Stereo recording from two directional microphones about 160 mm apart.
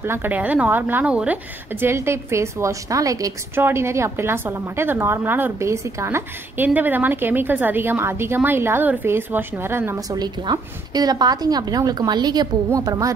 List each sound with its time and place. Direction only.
0.0 s a woman's voice: 15° right (ahead or behind)
10.2 s a woman's voice: 25° right (ahead or behind)